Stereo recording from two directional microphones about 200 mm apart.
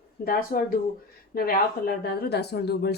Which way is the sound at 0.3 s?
45° left (ahead or behind).